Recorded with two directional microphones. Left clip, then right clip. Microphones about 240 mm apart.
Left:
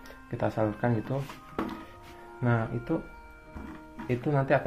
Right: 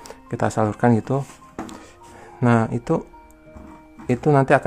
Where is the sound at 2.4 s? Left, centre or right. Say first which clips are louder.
Right 11 dB; right.